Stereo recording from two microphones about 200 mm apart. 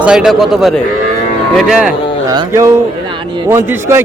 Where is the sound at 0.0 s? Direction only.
5° right (ahead or behind).